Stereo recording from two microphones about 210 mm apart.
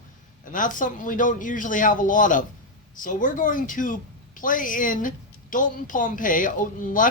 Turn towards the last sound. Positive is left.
turn(degrees=40)  # may be behind; listen again after turning